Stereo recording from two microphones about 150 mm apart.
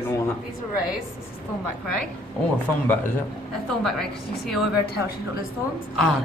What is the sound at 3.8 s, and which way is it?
Speech, centre (ahead or behind).